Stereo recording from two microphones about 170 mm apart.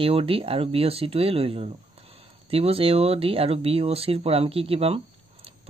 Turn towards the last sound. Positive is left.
turn(degrees=-35)  # may be behind; listen again after turning